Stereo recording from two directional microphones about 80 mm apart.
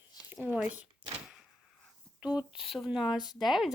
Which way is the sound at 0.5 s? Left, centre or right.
Centre.